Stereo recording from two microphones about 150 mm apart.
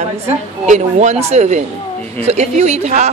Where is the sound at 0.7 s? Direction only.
50° right (ahead or behind).